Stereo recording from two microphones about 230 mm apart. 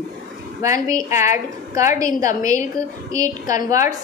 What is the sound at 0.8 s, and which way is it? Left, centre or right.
Speech, centre.